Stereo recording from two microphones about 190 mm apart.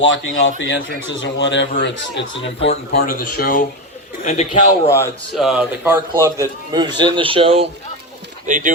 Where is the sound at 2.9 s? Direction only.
50° left (ahead or behind).